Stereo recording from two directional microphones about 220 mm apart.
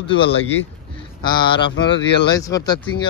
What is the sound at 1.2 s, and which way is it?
A man's voice, 20° left (ahead or behind).